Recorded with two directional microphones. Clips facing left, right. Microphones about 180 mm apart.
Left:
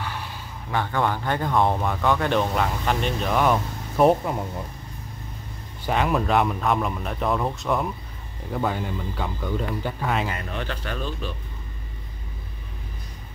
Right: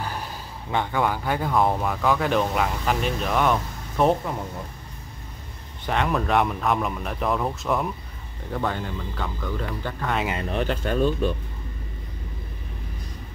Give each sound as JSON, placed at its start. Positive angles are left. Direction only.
{"t": 0.0, "sound": "a sound", "side_deg": -40}
{"t": 0.7, "sound": "a man's voice", "side_deg": -20}
{"t": 1.0, "sound": "speech", "side_deg": -10}
{"t": 5.9, "sound": "speech", "side_deg": 5}
{"t": 8.5, "sound": "speech", "side_deg": 10}
{"t": 10.5, "sound": "speech", "side_deg": -35}